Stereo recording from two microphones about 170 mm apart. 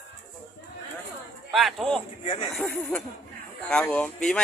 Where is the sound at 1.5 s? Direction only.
Centre (ahead or behind).